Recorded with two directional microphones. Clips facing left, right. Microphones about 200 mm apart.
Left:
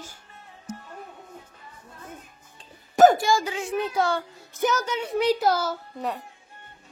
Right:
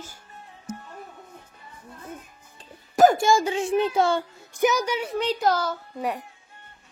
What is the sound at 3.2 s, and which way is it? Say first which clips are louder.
A child's voice: right 3 dB; 25° right (ahead or behind).